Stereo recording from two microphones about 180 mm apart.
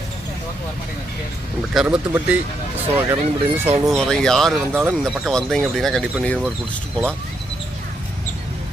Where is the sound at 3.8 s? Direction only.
5° left (ahead or behind).